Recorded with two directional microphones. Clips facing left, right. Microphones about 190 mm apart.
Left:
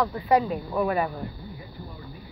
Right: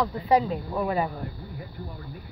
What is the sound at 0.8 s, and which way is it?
Speech, 20° right (ahead or behind).